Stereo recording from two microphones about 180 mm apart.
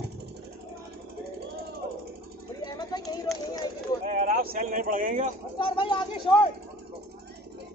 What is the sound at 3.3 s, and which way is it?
Run, centre (ahead or behind).